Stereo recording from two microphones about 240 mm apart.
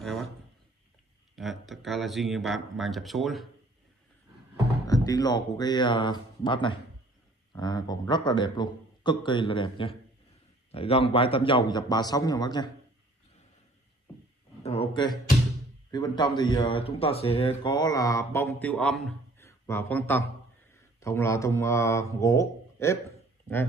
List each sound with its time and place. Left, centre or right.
0.0 s a sound: centre
1.3 s speech: centre
4.8 s a man's voice: centre
14.6 s a man's voice: left